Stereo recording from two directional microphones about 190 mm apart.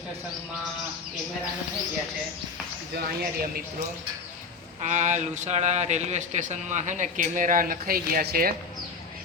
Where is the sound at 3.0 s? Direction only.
55° right (ahead or behind).